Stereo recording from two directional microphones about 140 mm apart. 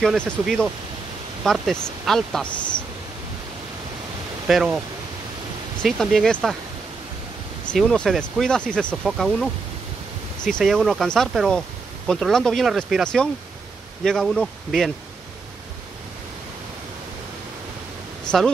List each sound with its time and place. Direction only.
0.0 s speech: centre (ahead or behind)
4.5 s speech: centre (ahead or behind)
5.8 s speech: centre (ahead or behind)
7.6 s speech: 5° left (ahead or behind)
18.2 s a sound: 5° left (ahead or behind)